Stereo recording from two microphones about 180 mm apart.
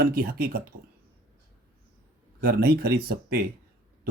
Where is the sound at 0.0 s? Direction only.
55° right (ahead or behind).